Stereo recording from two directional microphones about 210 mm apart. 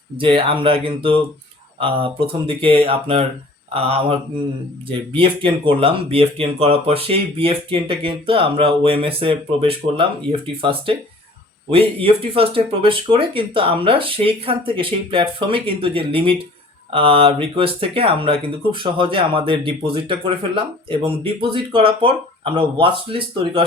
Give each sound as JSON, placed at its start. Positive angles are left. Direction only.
{"t": 0.2, "sound": "speech", "side_deg": -25}